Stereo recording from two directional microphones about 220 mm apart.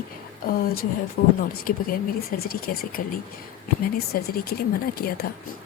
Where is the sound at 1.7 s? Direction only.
40° left (ahead or behind).